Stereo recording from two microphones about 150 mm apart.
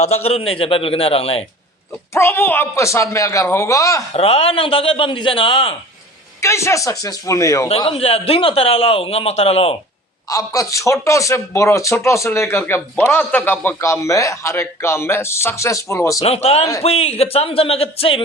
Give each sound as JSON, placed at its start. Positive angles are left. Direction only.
{"t": 0.0, "sound": "speech", "side_deg": 45}
{"t": 2.1, "sound": "a man's voice", "side_deg": 15}
{"t": 4.1, "sound": "speech", "side_deg": 40}
{"t": 6.4, "sound": "a man's voice", "side_deg": 20}
{"t": 7.9, "sound": "speech", "side_deg": 40}
{"t": 10.2, "sound": "a man's voice", "side_deg": 25}
{"t": 16.2, "sound": "speech", "side_deg": 40}